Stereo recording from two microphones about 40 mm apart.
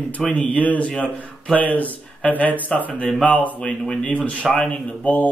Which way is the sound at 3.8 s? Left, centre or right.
Left.